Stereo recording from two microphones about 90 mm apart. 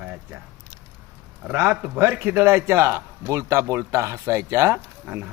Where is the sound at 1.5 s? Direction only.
25° right (ahead or behind).